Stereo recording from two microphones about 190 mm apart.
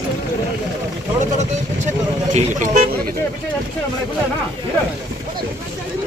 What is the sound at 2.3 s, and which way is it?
Speech, 40° right (ahead or behind).